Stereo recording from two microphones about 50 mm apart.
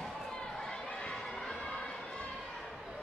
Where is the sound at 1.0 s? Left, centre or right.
Centre.